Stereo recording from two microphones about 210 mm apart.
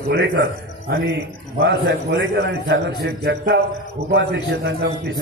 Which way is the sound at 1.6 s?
50° right (ahead or behind).